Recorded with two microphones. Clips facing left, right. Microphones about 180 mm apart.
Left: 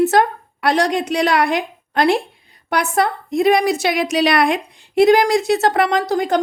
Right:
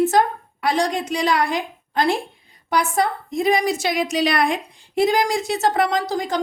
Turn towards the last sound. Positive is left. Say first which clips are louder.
# left 5 dB
turn(degrees=60)  # may be behind; listen again after turning